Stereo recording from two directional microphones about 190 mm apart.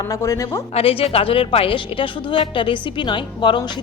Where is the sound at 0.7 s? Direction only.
30° left (ahead or behind).